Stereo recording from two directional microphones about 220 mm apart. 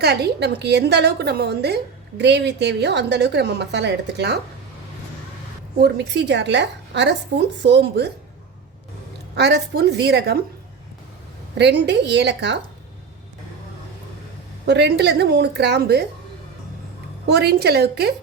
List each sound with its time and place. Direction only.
0.0 s a woman's voice: 50° right (ahead or behind)
5.8 s a woman's voice: 50° right (ahead or behind)
9.3 s a woman's voice: 50° right (ahead or behind)
11.5 s a woman's voice: 50° right (ahead or behind)
14.7 s a woman's voice: 50° right (ahead or behind)
17.2 s a woman's voice: 50° right (ahead or behind)